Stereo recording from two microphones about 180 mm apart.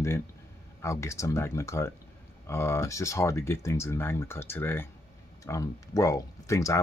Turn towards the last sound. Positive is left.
turn(degrees=15)  # may be behind; listen again after turning